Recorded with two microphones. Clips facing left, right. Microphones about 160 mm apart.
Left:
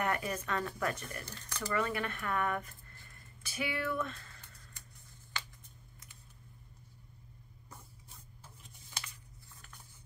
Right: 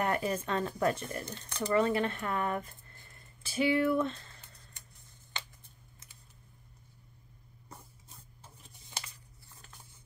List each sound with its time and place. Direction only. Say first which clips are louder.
0.0 s speech: right 4 dB; 30° right (ahead or behind)